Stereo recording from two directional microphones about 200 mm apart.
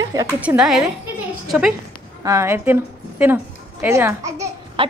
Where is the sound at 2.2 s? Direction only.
15° right (ahead or behind).